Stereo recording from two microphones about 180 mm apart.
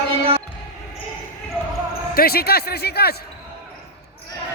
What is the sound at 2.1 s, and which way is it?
Speech, 55° left (ahead or behind).